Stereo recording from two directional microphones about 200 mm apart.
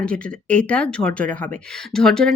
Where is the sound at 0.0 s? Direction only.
5° left (ahead or behind).